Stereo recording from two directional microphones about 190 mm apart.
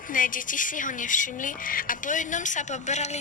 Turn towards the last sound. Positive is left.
turn(degrees=35)  # may be behind; listen again after turning